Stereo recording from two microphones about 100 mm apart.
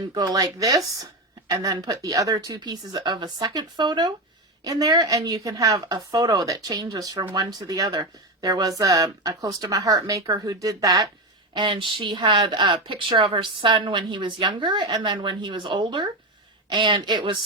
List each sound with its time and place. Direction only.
0.1 s speech: 45° right (ahead or behind)
11.5 s speech: 55° right (ahead or behind)